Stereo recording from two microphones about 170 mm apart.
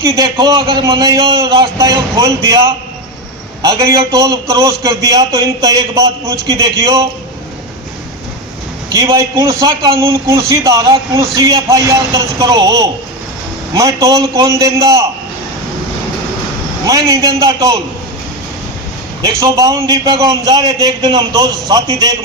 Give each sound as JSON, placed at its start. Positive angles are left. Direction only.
{"t": 0.0, "sound": "a man's voice", "side_deg": -20}
{"t": 3.6, "sound": "a man's voice", "side_deg": -20}
{"t": 8.9, "sound": "a man's voice", "side_deg": -20}
{"t": 16.8, "sound": "a man's voice", "side_deg": -20}
{"t": 19.4, "sound": "a man's voice", "side_deg": -20}